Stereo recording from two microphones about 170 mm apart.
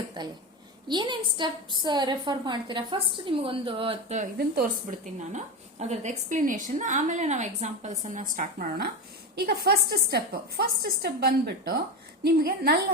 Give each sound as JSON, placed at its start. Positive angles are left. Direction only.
{"t": 0.2, "sound": "a woman's voice", "side_deg": -25}
{"t": 4.4, "sound": "a woman's voice", "side_deg": -55}
{"t": 9.5, "sound": "a woman's voice", "side_deg": -70}